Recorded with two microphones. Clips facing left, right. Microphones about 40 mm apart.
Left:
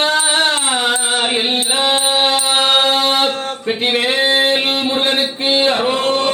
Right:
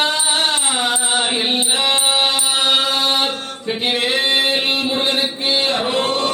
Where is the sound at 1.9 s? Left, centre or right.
Left.